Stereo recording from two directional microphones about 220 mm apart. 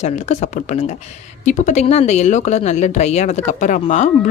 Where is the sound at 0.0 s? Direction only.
30° left (ahead or behind).